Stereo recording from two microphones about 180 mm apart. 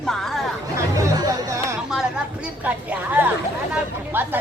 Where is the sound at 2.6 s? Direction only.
10° right (ahead or behind).